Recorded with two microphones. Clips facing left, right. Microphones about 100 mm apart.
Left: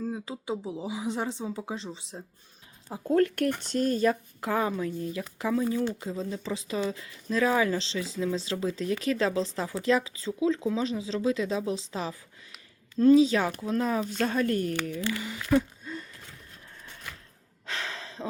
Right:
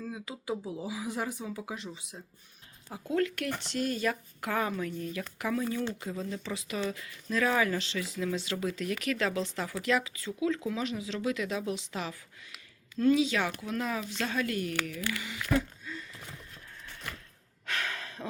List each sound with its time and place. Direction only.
0.0 s speech: 30° left (ahead or behind)
3.1 s speech: 45° left (ahead or behind)
4.1 s speech: 25° left (ahead or behind)
14.8 s speech: 25° left (ahead or behind)
15.8 s gasp: 35° left (ahead or behind)
17.7 s a sound: 25° left (ahead or behind)